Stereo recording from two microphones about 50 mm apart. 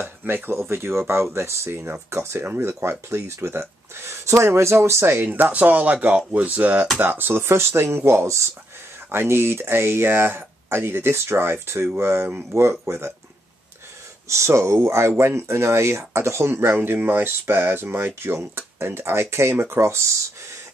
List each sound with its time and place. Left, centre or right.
0.2 s speech: right
0.6 s speech: right
2.0 s speech: right
5.2 s speech: right
14.3 s speech: right
16.7 s speech: right